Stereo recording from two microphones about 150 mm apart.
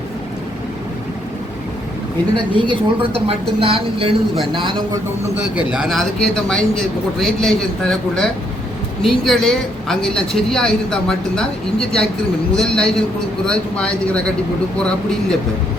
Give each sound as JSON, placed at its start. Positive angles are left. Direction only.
{"t": 2.5, "sound": "speech", "side_deg": -35}
{"t": 5.5, "sound": "speech", "side_deg": -5}